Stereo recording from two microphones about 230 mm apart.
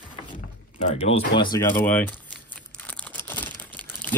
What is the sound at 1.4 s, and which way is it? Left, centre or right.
Speech, centre.